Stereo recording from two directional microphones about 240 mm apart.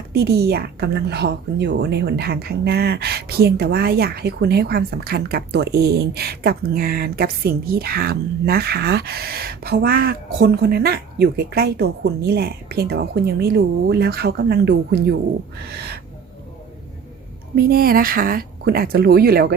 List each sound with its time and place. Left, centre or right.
0.1 s speech: right
17.5 s speech: right